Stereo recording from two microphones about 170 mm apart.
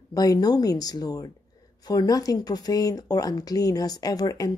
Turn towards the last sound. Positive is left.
turn(degrees=20)  # may be behind; listen again after turning